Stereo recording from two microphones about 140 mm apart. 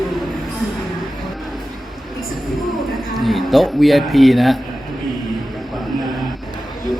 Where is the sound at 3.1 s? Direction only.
Centre (ahead or behind).